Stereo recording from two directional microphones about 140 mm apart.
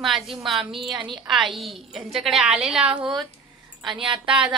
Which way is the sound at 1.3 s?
Centre (ahead or behind).